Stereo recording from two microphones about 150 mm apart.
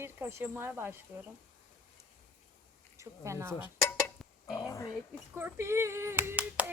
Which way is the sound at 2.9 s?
20° right (ahead or behind).